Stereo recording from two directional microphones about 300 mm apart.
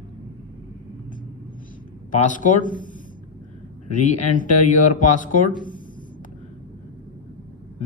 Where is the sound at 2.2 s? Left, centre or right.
Left.